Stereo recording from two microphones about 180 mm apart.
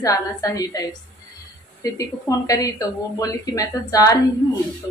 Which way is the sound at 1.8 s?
20° left (ahead or behind).